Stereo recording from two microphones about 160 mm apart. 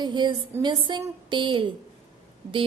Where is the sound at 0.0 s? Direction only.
30° right (ahead or behind).